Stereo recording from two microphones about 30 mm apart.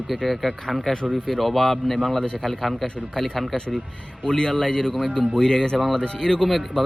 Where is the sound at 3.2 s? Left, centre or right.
Left.